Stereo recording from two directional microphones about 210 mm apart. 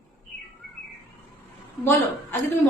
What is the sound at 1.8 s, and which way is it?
Speech, 10° left (ahead or behind).